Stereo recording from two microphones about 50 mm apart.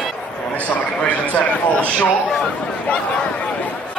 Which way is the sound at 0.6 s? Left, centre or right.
Left.